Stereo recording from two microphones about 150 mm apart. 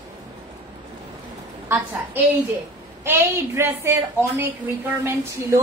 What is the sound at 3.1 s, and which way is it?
A woman's voice, 15° right (ahead or behind).